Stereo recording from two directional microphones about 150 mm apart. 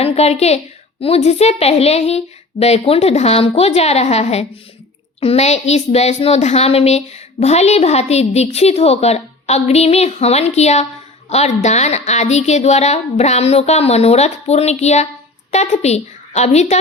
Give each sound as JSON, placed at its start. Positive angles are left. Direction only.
{"t": 0.0, "sound": "a woman's voice", "side_deg": 45}